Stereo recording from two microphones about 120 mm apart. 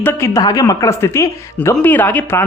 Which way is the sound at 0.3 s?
30° left (ahead or behind).